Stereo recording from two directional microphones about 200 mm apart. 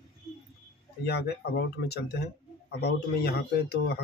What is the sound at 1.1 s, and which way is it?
A man's voice, 55° left (ahead or behind).